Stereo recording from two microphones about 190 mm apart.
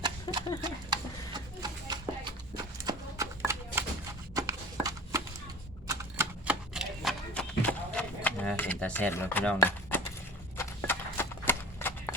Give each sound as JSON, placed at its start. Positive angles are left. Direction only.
{"t": 0.0, "sound": "horse", "side_deg": -25}
{"t": 0.6, "sound": "a sound", "side_deg": -25}
{"t": 2.8, "sound": "horse", "side_deg": -15}
{"t": 4.4, "sound": "shuffling cards", "side_deg": -20}
{"t": 5.9, "sound": "typewriter", "side_deg": -15}
{"t": 9.6, "sound": "a sound", "side_deg": 10}